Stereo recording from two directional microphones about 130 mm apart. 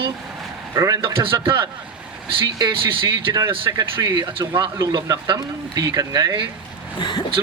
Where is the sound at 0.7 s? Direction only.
25° right (ahead or behind).